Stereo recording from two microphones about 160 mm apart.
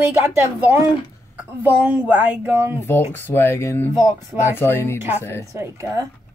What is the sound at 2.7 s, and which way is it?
Speech, 15° left (ahead or behind).